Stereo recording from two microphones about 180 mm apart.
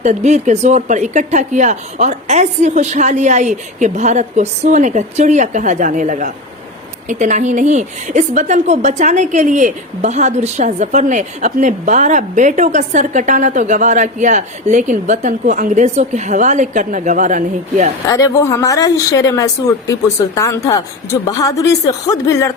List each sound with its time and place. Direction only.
0.0 s a woman's voice: 40° right (ahead or behind)
18.1 s a woman's voice: 15° left (ahead or behind)